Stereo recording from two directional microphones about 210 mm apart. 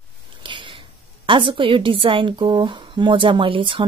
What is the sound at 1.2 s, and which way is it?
A woman's voice, 25° right (ahead or behind).